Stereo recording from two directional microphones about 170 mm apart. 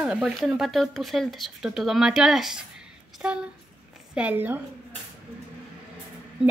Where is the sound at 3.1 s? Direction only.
5° right (ahead or behind).